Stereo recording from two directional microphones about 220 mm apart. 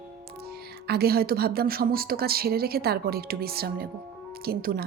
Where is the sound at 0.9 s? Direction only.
45° right (ahead or behind).